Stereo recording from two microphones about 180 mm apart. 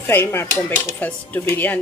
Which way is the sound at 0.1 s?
10° left (ahead or behind).